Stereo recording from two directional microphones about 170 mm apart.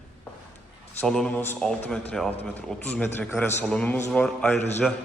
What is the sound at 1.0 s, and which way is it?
A man's voice, 5° left (ahead or behind).